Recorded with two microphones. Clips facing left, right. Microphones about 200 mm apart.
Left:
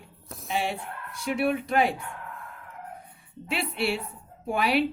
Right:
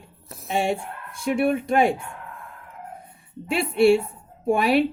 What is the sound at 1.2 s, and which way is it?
Speech, 45° right (ahead or behind).